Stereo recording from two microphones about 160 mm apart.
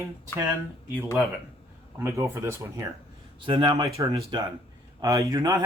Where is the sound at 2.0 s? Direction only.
20° right (ahead or behind).